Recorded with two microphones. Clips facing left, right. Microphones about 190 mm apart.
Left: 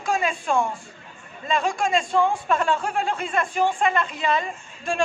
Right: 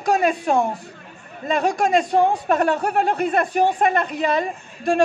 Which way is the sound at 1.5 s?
40° right (ahead or behind).